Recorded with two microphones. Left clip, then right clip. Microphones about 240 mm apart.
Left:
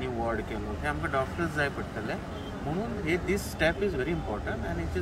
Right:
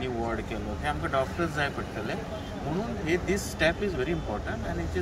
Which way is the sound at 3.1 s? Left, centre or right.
Centre.